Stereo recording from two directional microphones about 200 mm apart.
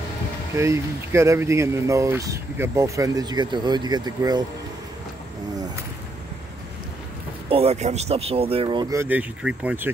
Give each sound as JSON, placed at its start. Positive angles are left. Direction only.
{"t": 0.6, "sound": "speech", "side_deg": -15}
{"t": 7.4, "sound": "speech", "side_deg": -30}